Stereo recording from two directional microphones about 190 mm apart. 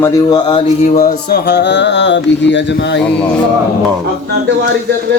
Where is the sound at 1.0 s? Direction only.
45° left (ahead or behind).